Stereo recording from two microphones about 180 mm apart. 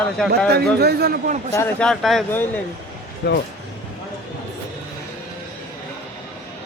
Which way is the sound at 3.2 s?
65° left (ahead or behind).